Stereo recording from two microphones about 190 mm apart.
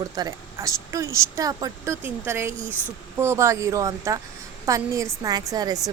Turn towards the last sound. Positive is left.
turn(degrees=-20)  # may be behind; listen again after turning